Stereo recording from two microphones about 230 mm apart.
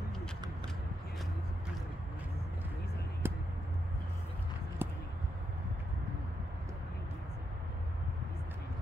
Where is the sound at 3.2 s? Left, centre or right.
Centre.